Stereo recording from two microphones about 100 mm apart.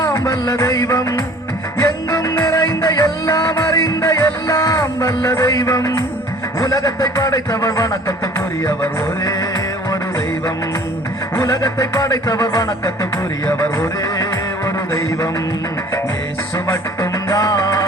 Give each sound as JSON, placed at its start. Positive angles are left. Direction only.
{"t": 0.1, "sound": "music", "side_deg": 30}
{"t": 6.6, "sound": "a sound", "side_deg": 35}
{"t": 8.6, "sound": "music", "side_deg": 30}
{"t": 11.3, "sound": "music", "side_deg": 30}
{"t": 16.6, "sound": "music", "side_deg": 30}